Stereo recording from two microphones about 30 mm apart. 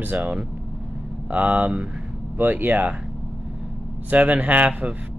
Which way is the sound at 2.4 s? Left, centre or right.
Right.